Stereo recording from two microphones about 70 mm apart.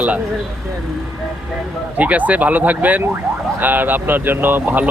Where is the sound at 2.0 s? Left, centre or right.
Right.